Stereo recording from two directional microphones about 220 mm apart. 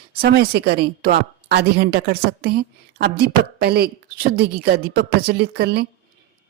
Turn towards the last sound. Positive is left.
turn(degrees=-50)  # may be behind; listen again after turning